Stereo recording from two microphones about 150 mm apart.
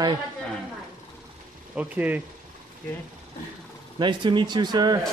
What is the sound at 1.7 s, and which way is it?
Speech, 10° right (ahead or behind).